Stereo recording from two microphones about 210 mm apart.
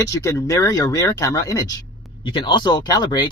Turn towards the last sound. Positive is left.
turn(degrees=20)  # may be behind; listen again after turning